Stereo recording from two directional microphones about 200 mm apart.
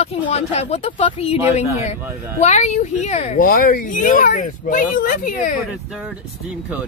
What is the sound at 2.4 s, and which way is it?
Speech, 35° left (ahead or behind).